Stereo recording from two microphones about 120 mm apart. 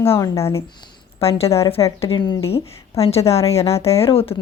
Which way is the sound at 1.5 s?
25° left (ahead or behind).